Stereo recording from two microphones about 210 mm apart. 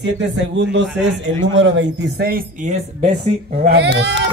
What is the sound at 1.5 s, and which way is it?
Speech, 60° right (ahead or behind).